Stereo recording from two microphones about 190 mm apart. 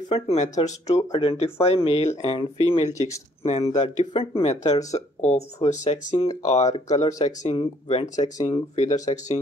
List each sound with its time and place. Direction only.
0.1 s speech: 35° left (ahead or behind)
8.7 s speech: 40° left (ahead or behind)